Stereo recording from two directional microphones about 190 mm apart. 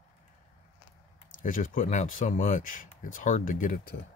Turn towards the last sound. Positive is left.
turn(degrees=45)  # may be behind; listen again after turning